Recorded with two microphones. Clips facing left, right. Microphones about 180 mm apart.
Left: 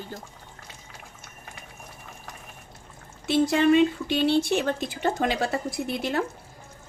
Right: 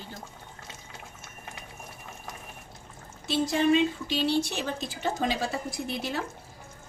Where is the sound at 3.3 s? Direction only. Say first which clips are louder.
Left 4 dB; 60° left (ahead or behind).